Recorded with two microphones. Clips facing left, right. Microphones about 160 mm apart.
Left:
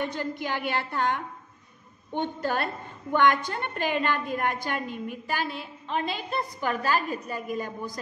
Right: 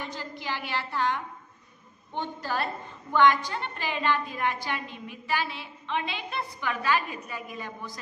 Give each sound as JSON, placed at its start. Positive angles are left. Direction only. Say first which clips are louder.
{"t": 0.0, "sound": "a woman's voice", "louder": "left 6 dB", "side_deg": 55}